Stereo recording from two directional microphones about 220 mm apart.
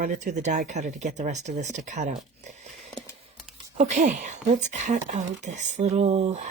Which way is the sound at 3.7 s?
30° right (ahead or behind).